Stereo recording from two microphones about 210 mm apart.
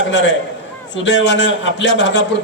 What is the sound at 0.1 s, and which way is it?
A man's voice, 60° left (ahead or behind).